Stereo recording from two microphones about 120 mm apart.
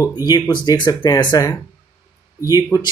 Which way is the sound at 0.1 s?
35° left (ahead or behind).